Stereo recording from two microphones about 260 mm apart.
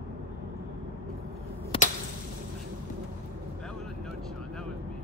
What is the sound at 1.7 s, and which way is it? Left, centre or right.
Whip, left.